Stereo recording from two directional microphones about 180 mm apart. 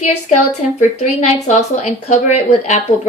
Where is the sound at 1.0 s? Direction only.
40° left (ahead or behind).